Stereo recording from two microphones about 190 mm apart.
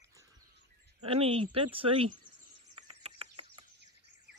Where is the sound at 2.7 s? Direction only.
30° right (ahead or behind).